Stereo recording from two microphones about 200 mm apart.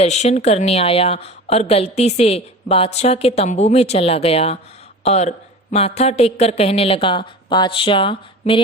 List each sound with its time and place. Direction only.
0.0 s a woman's voice: 35° left (ahead or behind)